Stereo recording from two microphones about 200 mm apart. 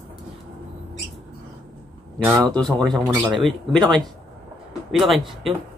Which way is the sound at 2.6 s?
Centre (ahead or behind).